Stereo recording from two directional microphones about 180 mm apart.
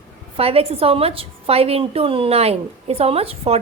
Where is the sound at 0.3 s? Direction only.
35° right (ahead or behind).